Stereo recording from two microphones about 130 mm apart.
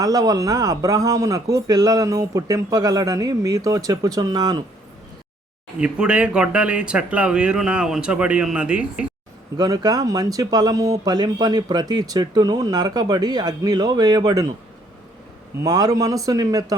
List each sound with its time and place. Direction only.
0.0 s speech: 30° right (ahead or behind)
5.8 s speech: 10° right (ahead or behind)
9.6 s speech: 30° right (ahead or behind)
15.6 s speech: 30° right (ahead or behind)